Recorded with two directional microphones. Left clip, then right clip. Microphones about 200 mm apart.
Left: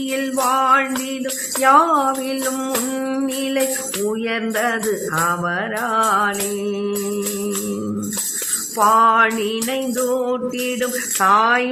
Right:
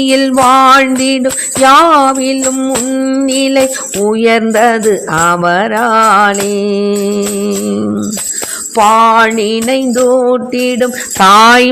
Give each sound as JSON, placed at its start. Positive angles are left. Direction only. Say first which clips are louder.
{"t": 0.0, "sound": "music", "louder": "right 12 dB", "side_deg": -50}
{"t": 1.7, "sound": "music", "louder": "right 8 dB", "side_deg": -40}
{"t": 2.6, "sound": "music", "louder": "right 9 dB", "side_deg": -25}
{"t": 3.2, "sound": "music", "louder": "right 12 dB", "side_deg": -45}
{"t": 8.7, "sound": "music", "louder": "right 7 dB", "side_deg": -40}